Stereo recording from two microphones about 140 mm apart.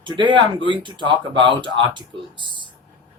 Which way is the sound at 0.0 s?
35° right (ahead or behind).